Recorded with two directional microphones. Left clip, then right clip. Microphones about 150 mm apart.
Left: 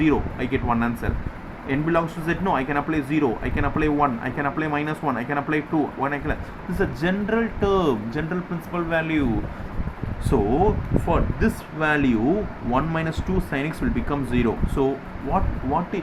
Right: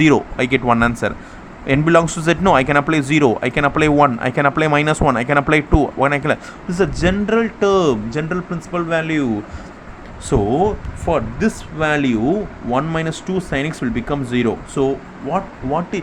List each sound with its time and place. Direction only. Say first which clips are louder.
0.0 s speech: right 8 dB; 90° right
1.6 s speech: right 9 dB; 90° right
6.7 s speech: right 7 dB; 55° right (ahead or behind)
10.2 s speech: right 4 dB; 40° right (ahead or behind)